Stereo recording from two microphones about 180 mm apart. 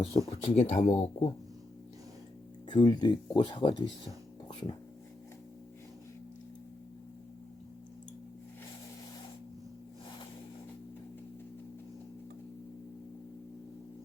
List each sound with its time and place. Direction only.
0.0 s speech: 35° left (ahead or behind)
2.6 s speech: 25° left (ahead or behind)